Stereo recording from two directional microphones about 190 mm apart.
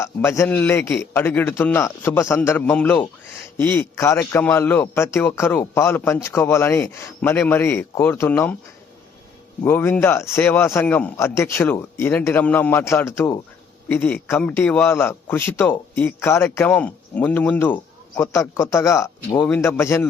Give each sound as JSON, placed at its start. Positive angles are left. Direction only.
{"t": 0.0, "sound": "a man's voice", "side_deg": 15}
{"t": 9.6, "sound": "a man's voice", "side_deg": 10}